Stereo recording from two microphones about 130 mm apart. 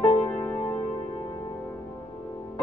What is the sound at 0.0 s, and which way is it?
Music, 10° left (ahead or behind).